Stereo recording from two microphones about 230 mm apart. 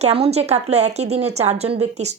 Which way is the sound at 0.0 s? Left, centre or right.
Right.